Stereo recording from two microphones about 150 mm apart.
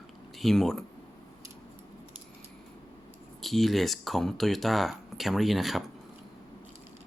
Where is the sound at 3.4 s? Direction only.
Centre (ahead or behind).